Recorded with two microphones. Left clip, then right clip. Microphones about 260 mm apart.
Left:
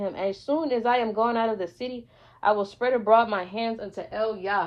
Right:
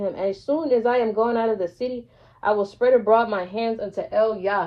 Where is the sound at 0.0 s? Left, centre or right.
Centre.